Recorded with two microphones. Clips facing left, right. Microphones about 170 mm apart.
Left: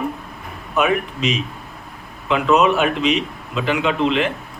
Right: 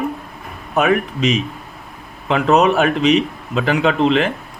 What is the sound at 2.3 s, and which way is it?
Speech, 40° right (ahead or behind).